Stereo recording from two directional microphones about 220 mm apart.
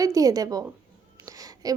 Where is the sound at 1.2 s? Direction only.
15° right (ahead or behind).